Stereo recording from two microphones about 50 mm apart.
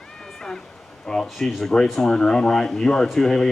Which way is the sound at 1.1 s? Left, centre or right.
Centre.